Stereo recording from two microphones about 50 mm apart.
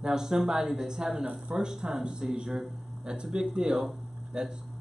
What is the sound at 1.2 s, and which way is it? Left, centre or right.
Speech, right.